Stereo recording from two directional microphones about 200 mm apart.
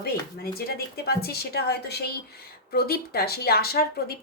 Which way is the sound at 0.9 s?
50° left (ahead or behind).